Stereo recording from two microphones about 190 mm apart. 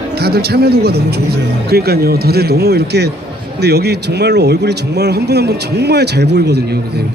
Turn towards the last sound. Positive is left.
turn(degrees=-60)  # may be behind; listen again after turning